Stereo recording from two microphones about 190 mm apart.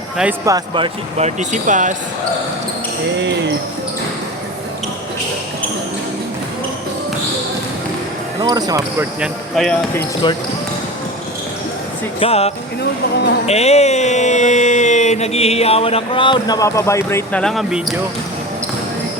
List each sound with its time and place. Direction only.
0.4 s speech: 20° right (ahead or behind)
1.4 s speech: 40° right (ahead or behind)
8.4 s speech: 20° right (ahead or behind)
9.2 s speech: centre (ahead or behind)
10.2 s speech: 25° left (ahead or behind)
12.2 s speech: 30° left (ahead or behind); by 17.4 s 15° left (ahead or behind)
17.4 s speech: centre (ahead or behind)